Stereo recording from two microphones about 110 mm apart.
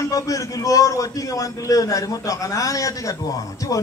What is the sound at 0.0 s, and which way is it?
A man's voice, 30° left (ahead or behind).